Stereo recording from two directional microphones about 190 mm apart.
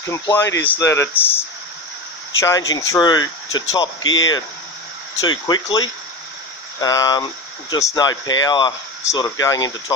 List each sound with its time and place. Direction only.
0.0 s speech: 15° left (ahead or behind)
2.4 s speech: 20° left (ahead or behind)
4.0 s speech: 90° left
5.3 s speech: 25° left (ahead or behind)